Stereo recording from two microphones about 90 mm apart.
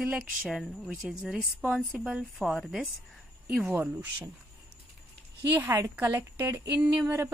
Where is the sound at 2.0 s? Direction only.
Centre (ahead or behind).